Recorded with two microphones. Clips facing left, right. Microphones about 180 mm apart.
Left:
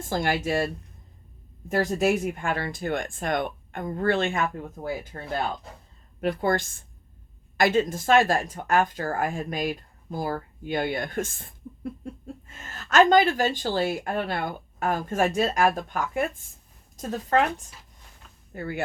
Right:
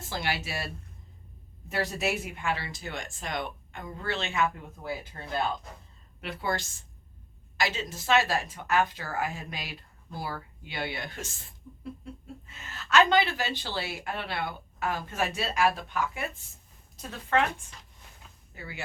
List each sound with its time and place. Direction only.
0.0 s speech: 50° left (ahead or behind)
1.7 s a woman's voice: 45° left (ahead or behind)
18.5 s speech: 50° left (ahead or behind)